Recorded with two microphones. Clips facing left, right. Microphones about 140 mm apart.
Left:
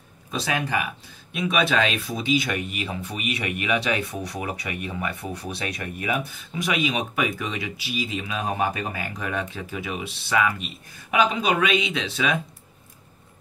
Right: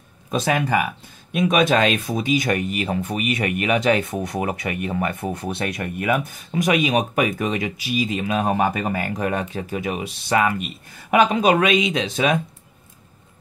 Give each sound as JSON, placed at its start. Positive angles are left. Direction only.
{"t": 1.3, "sound": "speech", "side_deg": -45}